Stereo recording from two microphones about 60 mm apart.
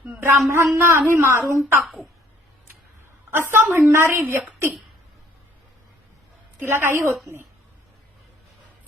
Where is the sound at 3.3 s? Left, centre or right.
Right.